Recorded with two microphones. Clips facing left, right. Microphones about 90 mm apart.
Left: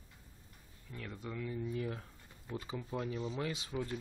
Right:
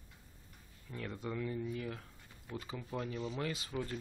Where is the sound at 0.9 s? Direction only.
Centre (ahead or behind).